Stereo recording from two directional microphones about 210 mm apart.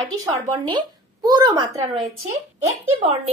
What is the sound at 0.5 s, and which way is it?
Speech, 20° right (ahead or behind).